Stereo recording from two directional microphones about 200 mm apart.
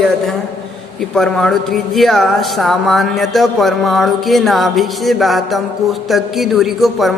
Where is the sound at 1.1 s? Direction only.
Centre (ahead or behind).